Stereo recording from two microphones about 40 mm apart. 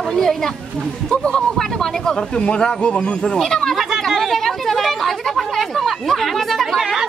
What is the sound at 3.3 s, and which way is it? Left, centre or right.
Speech, centre.